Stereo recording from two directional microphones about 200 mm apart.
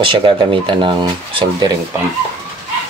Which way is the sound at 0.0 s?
25° right (ahead or behind).